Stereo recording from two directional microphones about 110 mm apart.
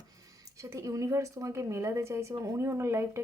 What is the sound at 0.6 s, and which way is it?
Speech, 25° right (ahead or behind).